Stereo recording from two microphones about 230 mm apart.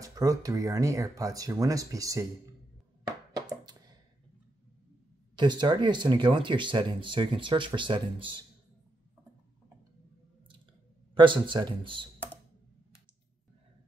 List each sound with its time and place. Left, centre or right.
0.0 s speech: centre
5.3 s speech: centre
11.1 s speech: right